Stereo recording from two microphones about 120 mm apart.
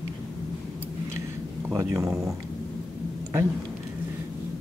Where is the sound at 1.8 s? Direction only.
25° right (ahead or behind).